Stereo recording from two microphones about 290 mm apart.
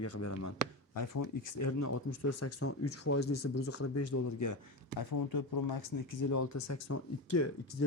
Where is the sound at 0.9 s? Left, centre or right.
Left.